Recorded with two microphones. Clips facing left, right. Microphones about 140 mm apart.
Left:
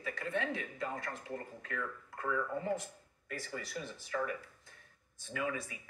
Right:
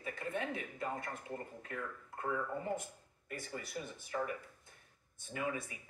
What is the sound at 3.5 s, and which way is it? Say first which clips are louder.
Speech: left 1 dB; 20° right (ahead or behind).